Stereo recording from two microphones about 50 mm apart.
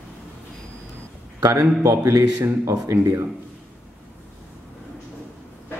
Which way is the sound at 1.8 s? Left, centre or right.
Right.